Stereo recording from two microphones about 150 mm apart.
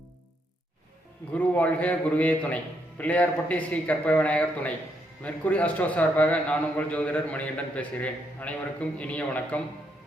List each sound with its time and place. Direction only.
1.3 s a man's voice: 10° left (ahead or behind)